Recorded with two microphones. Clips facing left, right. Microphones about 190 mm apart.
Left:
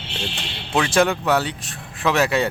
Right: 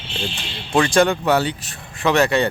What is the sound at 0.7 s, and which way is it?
Speech, 5° left (ahead or behind).